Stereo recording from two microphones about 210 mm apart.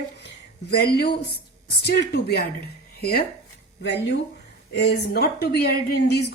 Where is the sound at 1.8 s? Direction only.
50° left (ahead or behind).